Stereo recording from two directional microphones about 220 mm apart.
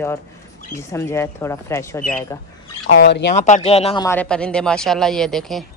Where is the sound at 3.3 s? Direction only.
30° left (ahead or behind).